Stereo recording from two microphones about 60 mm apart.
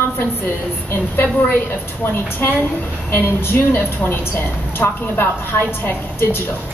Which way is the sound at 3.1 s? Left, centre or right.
Left.